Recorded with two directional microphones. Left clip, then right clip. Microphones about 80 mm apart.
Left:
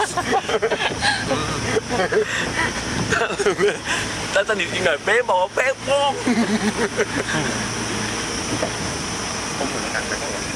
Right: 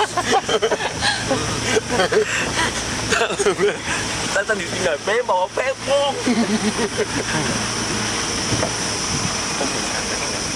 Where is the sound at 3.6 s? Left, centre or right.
Left.